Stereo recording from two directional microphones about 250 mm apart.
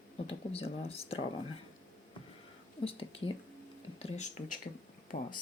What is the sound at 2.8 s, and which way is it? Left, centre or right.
Speech, left.